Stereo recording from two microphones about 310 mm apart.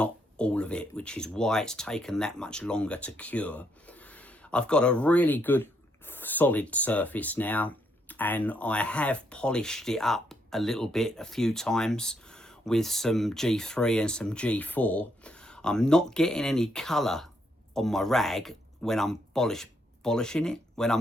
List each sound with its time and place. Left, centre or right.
0.0 s speech: centre